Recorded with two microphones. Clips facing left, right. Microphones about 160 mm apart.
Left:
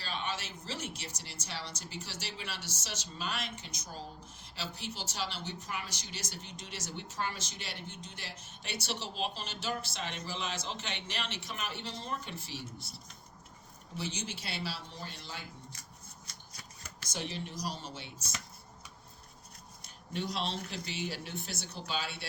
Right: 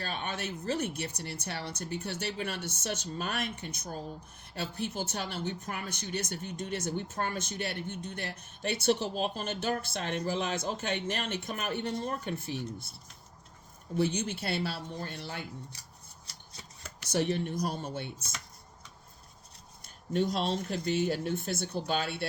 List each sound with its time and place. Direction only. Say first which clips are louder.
0.0 s speech: right 3 dB; 55° right (ahead or behind)
13.9 s speech: right 10 dB; 55° right (ahead or behind)
17.1 s speech: right 10 dB; 60° right (ahead or behind)
19.8 s speech: right 8 dB; 50° right (ahead or behind)